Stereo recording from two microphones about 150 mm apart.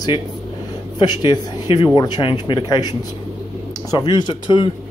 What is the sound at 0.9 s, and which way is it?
Speech, 30° left (ahead or behind).